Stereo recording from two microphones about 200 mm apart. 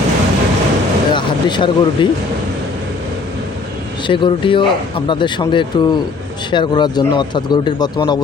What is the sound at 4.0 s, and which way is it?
A man's voice, 25° left (ahead or behind).